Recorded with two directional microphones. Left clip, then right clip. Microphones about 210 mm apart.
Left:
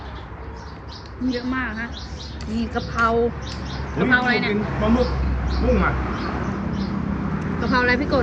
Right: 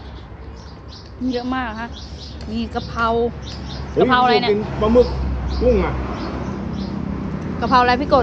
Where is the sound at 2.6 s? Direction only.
5° right (ahead or behind).